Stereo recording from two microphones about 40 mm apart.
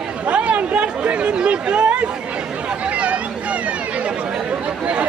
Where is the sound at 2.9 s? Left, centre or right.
Right.